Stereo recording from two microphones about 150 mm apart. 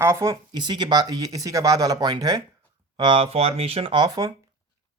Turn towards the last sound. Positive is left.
turn(degrees=-25)  # may be behind; listen again after turning